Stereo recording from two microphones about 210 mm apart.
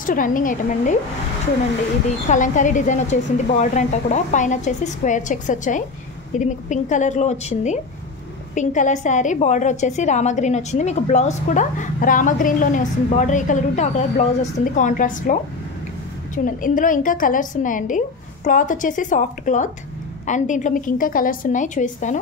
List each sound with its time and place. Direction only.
0.0 s a woman's voice: 40° left (ahead or behind)
2.2 s a woman's voice: 35° left (ahead or behind)
16.4 s a woman's voice: 40° left (ahead or behind)